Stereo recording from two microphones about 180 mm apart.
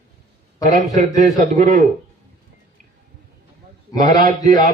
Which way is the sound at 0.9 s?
45° right (ahead or behind).